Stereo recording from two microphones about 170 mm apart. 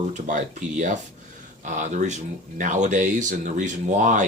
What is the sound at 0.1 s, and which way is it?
Speech, 45° right (ahead or behind).